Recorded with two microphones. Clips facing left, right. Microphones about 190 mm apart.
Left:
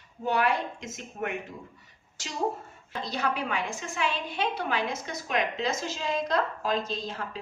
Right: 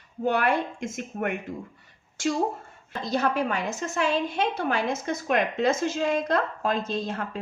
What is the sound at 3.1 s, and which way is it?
A woman's voice, 45° right (ahead or behind).